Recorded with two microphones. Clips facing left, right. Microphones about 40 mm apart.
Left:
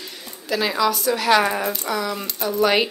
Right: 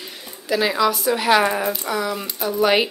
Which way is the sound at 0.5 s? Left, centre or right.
Centre.